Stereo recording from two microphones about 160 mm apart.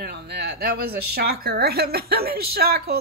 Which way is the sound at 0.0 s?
80° right.